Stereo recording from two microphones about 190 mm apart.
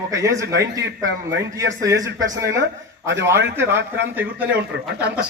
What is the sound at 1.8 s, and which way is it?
Speech, 15° right (ahead or behind).